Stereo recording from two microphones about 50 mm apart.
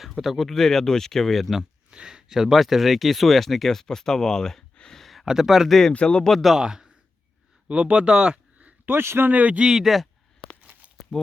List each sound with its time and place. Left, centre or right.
0.2 s speech: centre
1.9 s speech: centre
4.7 s a sound: centre
4.9 s a sound: centre
5.2 s speech: centre
5.9 s speech: left
6.2 s speech: centre
6.6 s a man's voice: centre
8.9 s speech: right
9.3 s speech: right
9.6 s speech: centre
10.6 s a sound: right